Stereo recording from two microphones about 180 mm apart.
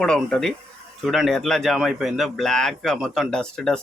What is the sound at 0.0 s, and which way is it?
Speech, 5° left (ahead or behind).